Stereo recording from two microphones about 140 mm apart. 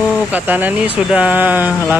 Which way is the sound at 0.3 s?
10° right (ahead or behind).